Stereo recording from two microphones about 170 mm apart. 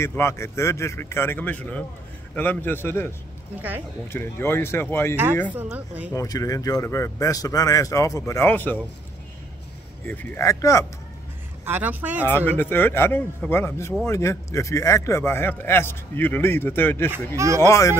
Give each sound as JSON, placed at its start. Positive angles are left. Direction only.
{"t": 0.0, "sound": "a man's voice", "side_deg": 15}
{"t": 4.1, "sound": "a man's voice", "side_deg": 15}
{"t": 5.5, "sound": "speech", "side_deg": -10}
{"t": 6.1, "sound": "speech", "side_deg": 20}
{"t": 10.0, "sound": "a man's voice", "side_deg": 10}
{"t": 11.6, "sound": "speech", "side_deg": -10}
{"t": 12.3, "sound": "a man's voice", "side_deg": 10}
{"t": 17.4, "sound": "speech", "side_deg": -20}
{"t": 17.6, "sound": "a man's voice", "side_deg": 20}